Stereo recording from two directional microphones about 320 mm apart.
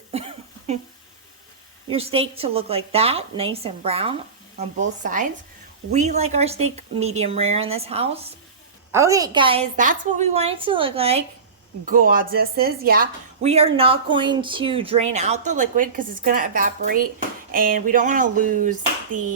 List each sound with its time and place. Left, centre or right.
0.7 s speech: centre
1.9 s a woman's voice: centre